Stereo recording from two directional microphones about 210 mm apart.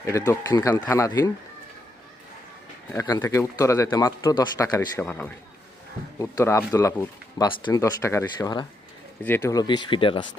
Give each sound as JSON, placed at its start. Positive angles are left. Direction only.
{"t": 0.0, "sound": "speech", "side_deg": 15}
{"t": 2.9, "sound": "speech", "side_deg": 15}